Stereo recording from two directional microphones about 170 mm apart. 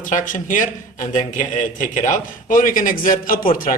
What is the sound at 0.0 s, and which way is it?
A man's voice, 50° left (ahead or behind).